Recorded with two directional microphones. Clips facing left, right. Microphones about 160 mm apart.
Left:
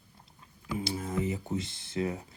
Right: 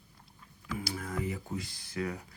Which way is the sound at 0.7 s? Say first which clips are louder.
Left 4 dB; 20° left (ahead or behind).